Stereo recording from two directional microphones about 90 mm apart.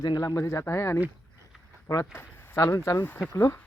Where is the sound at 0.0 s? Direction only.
45° left (ahead or behind); by 1.0 s 30° left (ahead or behind).